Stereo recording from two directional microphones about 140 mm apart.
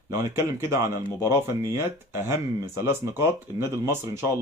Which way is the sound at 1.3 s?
20° right (ahead or behind).